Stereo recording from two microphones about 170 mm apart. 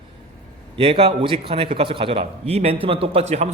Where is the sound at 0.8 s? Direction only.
35° right (ahead or behind).